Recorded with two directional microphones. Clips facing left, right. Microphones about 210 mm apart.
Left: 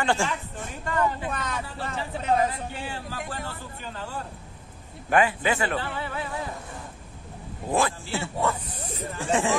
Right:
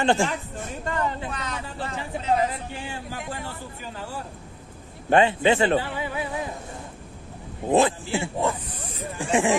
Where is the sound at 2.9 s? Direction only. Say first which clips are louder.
Right 1 dB; 15° right (ahead or behind).